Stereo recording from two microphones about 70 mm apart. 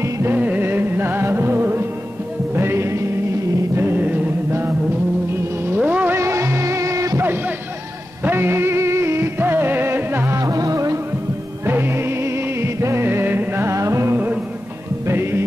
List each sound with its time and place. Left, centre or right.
0.3 s music: right
5.6 s vehicle: right
6.1 s music: right
7.2 s music: right
10.4 s music: right
11.6 s music: right
13.7 s music: right
15.0 s music: right